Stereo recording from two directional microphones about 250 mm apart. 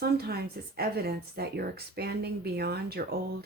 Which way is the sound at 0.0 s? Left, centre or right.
Right.